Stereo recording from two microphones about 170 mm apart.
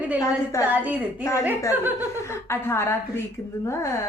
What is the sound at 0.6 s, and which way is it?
A woman's voice, 10° right (ahead or behind).